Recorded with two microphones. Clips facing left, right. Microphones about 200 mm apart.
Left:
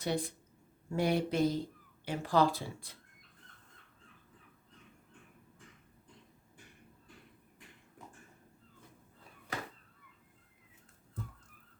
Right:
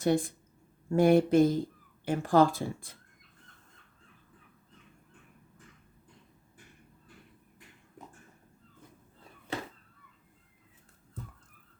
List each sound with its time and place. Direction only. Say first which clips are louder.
0.0 s speech: right 8 dB; 50° right (ahead or behind)